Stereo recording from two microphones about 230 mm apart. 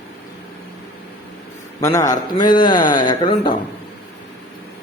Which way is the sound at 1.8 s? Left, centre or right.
Centre.